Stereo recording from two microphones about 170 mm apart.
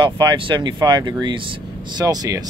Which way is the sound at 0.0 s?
25° right (ahead or behind).